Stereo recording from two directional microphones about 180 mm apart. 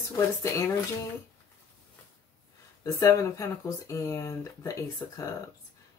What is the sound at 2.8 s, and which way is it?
Speech, 20° left (ahead or behind).